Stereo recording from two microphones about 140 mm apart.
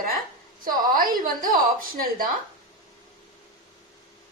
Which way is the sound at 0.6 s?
90° right.